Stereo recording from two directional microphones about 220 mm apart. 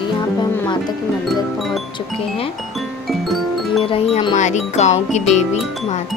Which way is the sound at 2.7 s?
Centre (ahead or behind).